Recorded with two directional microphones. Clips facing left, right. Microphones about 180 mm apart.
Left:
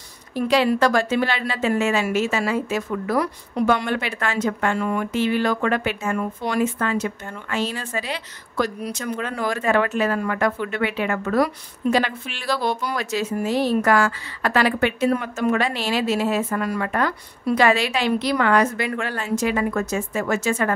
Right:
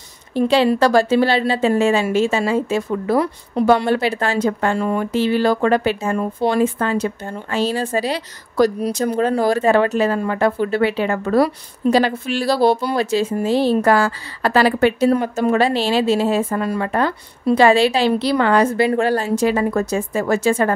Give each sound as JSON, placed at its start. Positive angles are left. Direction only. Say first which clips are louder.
{"t": 0.3, "sound": "a woman's voice", "louder": "right 4 dB", "side_deg": -30}